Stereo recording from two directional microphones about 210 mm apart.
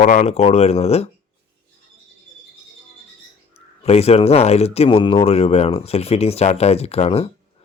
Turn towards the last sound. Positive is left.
turn(degrees=30)  # may be behind; listen again after turning